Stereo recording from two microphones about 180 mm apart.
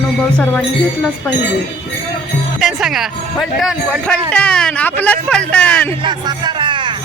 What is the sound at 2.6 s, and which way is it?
Speech, centre (ahead or behind).